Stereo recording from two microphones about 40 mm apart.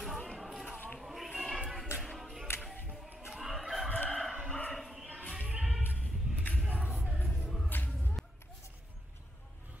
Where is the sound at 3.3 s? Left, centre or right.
Centre.